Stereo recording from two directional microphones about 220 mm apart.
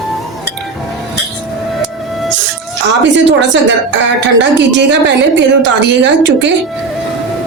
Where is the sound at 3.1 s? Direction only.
55° right (ahead or behind).